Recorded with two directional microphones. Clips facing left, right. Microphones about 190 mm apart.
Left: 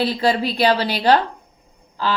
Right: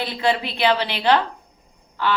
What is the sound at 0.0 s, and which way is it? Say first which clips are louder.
A woman's voice: left 3 dB; 35° left (ahead or behind).